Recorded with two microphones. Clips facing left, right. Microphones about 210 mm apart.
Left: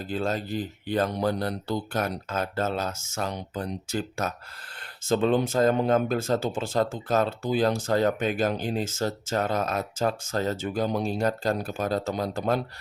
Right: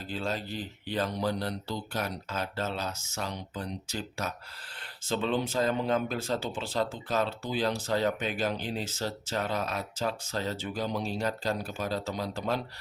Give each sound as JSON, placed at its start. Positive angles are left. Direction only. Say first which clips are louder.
{"t": 0.0, "sound": "speech", "louder": "left 5 dB", "side_deg": 50}